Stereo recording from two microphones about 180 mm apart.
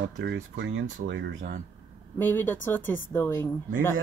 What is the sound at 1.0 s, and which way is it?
Speech, 75° right (ahead or behind).